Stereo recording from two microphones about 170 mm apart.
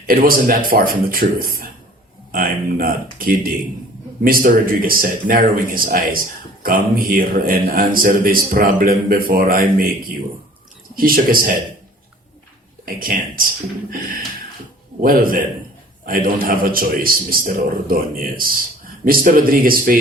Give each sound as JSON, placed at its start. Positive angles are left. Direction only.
{"t": 0.1, "sound": "speech", "side_deg": -60}
{"t": 10.9, "sound": "speech", "side_deg": -55}
{"t": 12.8, "sound": "speech", "side_deg": -55}
{"t": 15.0, "sound": "speech", "side_deg": -55}